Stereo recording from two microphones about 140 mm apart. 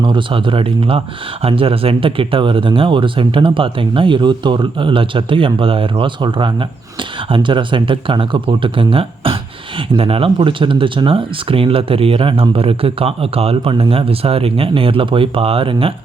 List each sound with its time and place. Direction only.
0.0 s speech: 35° right (ahead or behind)